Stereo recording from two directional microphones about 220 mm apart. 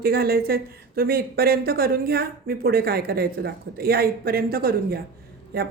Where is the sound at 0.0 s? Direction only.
45° right (ahead or behind).